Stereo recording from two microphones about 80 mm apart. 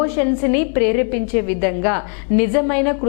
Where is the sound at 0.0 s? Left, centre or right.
Centre.